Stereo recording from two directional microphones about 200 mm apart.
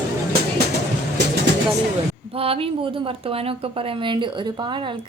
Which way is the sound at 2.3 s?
30° right (ahead or behind).